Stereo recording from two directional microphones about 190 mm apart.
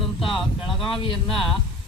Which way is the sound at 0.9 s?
25° left (ahead or behind).